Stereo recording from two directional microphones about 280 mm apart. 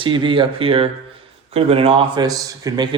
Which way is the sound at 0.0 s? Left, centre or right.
Centre.